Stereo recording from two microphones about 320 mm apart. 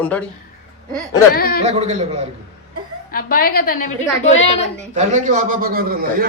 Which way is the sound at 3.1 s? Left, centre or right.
Left.